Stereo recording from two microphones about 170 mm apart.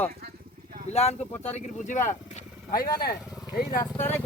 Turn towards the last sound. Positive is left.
turn(degrees=15)  # may be behind; listen again after turning